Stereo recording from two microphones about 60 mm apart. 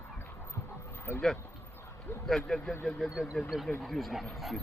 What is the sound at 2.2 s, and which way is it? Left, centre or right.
Speech, centre.